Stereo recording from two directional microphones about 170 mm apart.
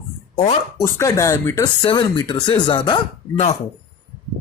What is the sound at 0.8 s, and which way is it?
Speech, 20° left (ahead or behind).